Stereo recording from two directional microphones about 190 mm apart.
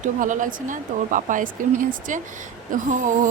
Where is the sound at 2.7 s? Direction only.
45° right (ahead or behind).